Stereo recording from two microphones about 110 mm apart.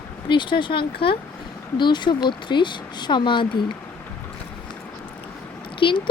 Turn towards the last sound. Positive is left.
turn(degrees=50)  # may be behind; listen again after turning